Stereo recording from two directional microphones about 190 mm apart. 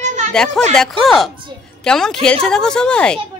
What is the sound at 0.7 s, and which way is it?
A woman's voice, centre (ahead or behind).